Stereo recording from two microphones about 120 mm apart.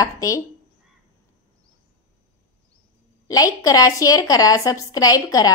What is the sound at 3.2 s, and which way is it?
A woman's voice, 30° left (ahead or behind).